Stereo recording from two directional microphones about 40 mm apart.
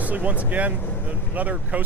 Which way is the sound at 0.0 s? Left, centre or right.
Right.